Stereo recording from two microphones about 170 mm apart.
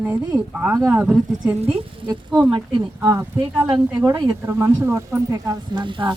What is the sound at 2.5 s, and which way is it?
Speech, 30° right (ahead or behind).